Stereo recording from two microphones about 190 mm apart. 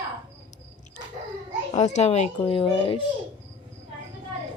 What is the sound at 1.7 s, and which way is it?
A child's voice, 35° left (ahead or behind).